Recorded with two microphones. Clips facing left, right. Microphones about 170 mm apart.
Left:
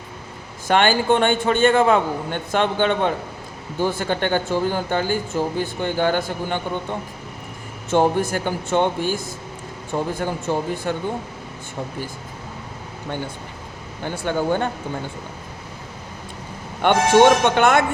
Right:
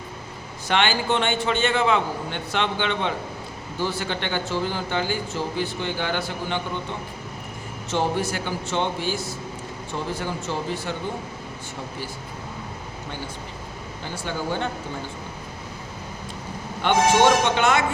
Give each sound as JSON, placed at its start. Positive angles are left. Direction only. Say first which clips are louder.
{"t": 0.7, "sound": "speech", "louder": "left 5 dB", "side_deg": 45}
{"t": 7.9, "sound": "speech", "louder": "left 6 dB", "side_deg": 50}
{"t": 14.0, "sound": "speech", "louder": "left 7 dB", "side_deg": 55}
{"t": 16.8, "sound": "speech", "louder": "left 4 dB", "side_deg": 55}